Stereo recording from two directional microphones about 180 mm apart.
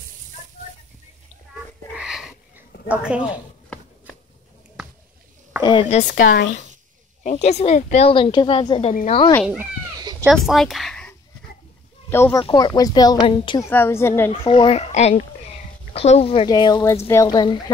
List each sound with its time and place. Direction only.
2.0 s wheeze: 5° right (ahead or behind)
2.9 s a woman's voice: 5° right (ahead or behind)
5.6 s speech: 25° left (ahead or behind)
5.9 s speech: 45° left (ahead or behind)
6.2 s speech: 65° left (ahead or behind)
7.2 s speech: 35° left (ahead or behind)
10.2 s speech: centre (ahead or behind)
12.1 s a woman's voice: 15° left (ahead or behind)
13.7 s a woman's voice: 10° left (ahead or behind)
14.3 s speech: 30° left (ahead or behind)